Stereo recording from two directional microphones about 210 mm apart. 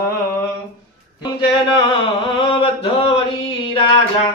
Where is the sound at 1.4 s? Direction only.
20° left (ahead or behind).